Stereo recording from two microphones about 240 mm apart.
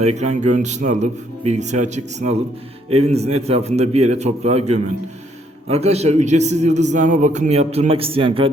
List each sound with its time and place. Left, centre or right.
0.0 s a man's voice: right